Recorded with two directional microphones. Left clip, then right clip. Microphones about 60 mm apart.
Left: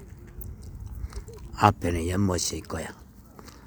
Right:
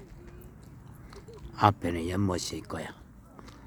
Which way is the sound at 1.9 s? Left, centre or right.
Left.